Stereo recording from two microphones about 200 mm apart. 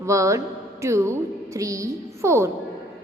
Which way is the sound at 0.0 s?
15° right (ahead or behind).